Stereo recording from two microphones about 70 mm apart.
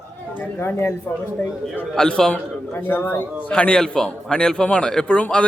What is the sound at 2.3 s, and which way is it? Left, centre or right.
Speech, left.